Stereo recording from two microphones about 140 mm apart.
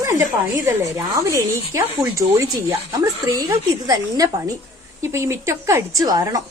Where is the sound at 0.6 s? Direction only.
20° right (ahead or behind).